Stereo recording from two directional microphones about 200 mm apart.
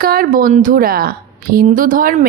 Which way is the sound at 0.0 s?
45° right (ahead or behind).